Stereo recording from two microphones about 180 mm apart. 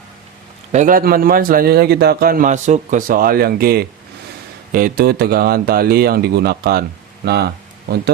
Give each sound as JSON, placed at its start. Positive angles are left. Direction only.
{"t": 0.7, "sound": "a man's voice", "side_deg": -45}